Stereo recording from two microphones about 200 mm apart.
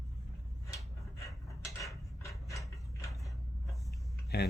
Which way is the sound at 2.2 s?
15° left (ahead or behind).